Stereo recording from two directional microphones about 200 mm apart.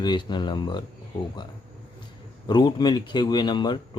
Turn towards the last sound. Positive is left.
turn(degrees=20)  # may be behind; listen again after turning